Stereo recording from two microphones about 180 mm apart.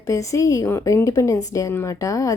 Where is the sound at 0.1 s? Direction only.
15° left (ahead or behind).